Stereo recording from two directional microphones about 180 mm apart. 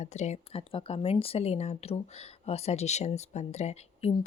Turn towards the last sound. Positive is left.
turn(degrees=35)  # may be behind; listen again after turning